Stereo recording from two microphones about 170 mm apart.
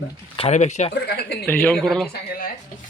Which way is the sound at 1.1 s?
70° left (ahead or behind).